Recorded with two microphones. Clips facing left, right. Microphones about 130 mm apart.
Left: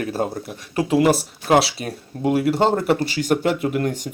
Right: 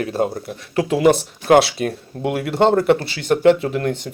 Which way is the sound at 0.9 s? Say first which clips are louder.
Right 2 dB; centre (ahead or behind).